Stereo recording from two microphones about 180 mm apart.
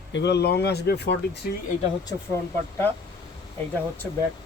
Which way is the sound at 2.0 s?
15° left (ahead or behind).